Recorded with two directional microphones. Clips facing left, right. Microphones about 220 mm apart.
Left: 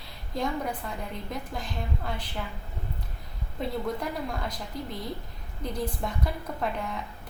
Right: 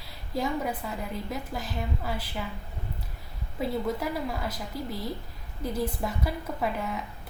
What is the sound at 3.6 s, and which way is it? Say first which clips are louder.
A woman's voice: right 2 dB; 5° right (ahead or behind).